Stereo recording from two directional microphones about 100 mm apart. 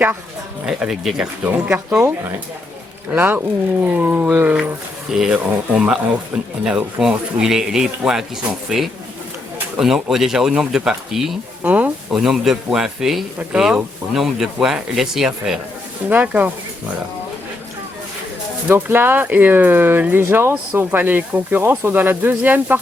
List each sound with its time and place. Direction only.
0.6 s speech: 5° right (ahead or behind)
1.5 s speech: 15° right (ahead or behind)
3.1 s speech: 20° right (ahead or behind)
5.1 s speech: 5° right (ahead or behind)
11.6 s speech: 15° right (ahead or behind)
12.1 s speech: 5° right (ahead or behind)
16.0 s speech: 15° right (ahead or behind)
18.7 s speech: 20° right (ahead or behind)